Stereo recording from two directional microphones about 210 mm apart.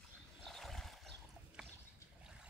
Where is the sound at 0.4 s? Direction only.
Centre (ahead or behind).